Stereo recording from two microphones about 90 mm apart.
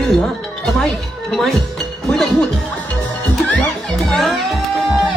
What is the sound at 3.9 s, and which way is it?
Music, 5° left (ahead or behind).